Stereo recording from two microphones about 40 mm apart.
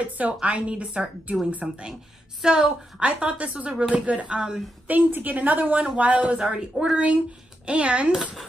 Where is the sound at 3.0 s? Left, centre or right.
Right.